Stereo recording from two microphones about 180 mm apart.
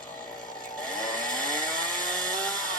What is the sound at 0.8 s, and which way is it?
Chainsaw, 5° left (ahead or behind).